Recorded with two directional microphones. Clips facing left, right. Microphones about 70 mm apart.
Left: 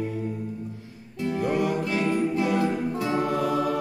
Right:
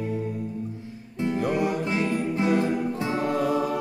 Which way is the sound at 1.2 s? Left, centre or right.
Right.